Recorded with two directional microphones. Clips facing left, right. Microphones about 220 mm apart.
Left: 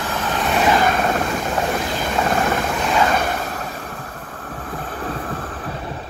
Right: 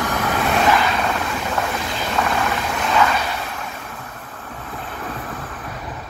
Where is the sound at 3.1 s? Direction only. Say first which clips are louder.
Left 3 dB; 50° left (ahead or behind).